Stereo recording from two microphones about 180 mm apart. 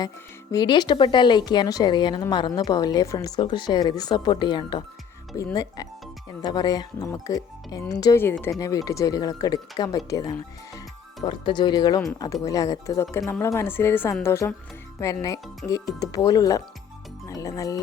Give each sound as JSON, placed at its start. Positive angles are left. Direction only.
{"t": 0.5, "sound": "speech", "side_deg": 25}